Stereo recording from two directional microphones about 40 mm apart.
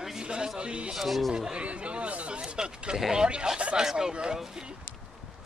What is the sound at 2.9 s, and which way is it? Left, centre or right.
Speech, centre.